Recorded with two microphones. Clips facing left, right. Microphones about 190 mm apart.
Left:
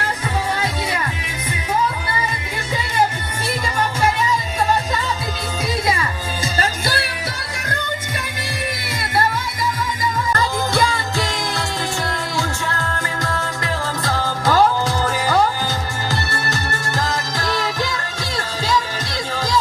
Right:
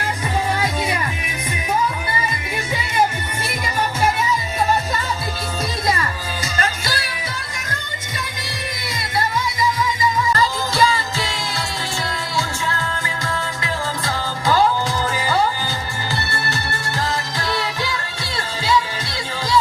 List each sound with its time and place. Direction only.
6.8 s music: 60° left (ahead or behind)
10.3 s music: 50° left (ahead or behind)
13.2 s music: 45° left (ahead or behind)
17.1 s music: 45° left (ahead or behind)